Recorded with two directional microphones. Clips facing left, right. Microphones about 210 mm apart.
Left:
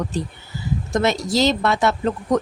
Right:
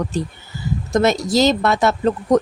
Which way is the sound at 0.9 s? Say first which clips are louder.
Right 4 dB; 45° right (ahead or behind).